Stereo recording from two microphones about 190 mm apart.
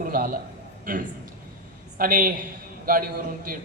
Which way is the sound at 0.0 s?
45° right (ahead or behind).